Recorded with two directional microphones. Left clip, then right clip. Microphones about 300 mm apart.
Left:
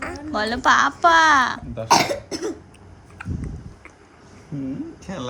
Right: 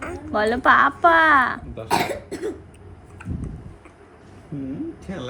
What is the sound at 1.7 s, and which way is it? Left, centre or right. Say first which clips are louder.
Cough: left 5 dB; left.